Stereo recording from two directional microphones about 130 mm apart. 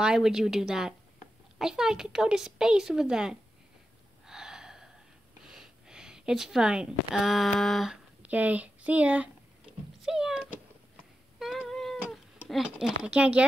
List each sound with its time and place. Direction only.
0.0 s speech: 5° right (ahead or behind)
4.3 s gasp: 5° right (ahead or behind)
5.4 s speech: 5° right (ahead or behind)
10.0 s a sound: 5° right (ahead or behind)
12.4 s speech: 5° right (ahead or behind)